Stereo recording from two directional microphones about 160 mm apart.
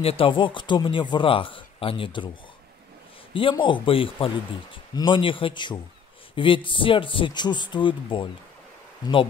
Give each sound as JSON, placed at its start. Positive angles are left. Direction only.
{"t": 0.0, "sound": "speech", "side_deg": 35}
{"t": 3.3, "sound": "speech", "side_deg": 30}